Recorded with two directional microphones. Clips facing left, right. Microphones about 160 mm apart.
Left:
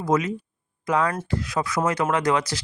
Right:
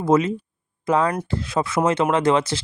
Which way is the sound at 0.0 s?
25° right (ahead or behind).